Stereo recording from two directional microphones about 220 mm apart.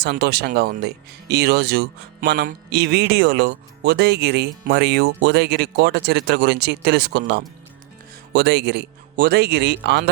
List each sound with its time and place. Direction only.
0.0 s speech: 45° right (ahead or behind)